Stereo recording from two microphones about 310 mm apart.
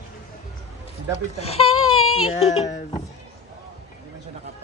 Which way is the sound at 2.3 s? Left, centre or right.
Centre.